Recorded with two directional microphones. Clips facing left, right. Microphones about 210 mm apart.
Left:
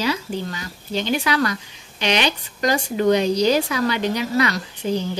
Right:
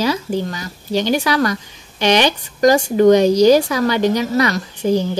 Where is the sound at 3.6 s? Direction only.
40° right (ahead or behind).